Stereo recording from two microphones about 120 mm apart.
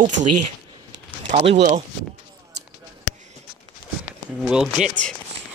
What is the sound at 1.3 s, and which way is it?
Speech, 65° right (ahead or behind).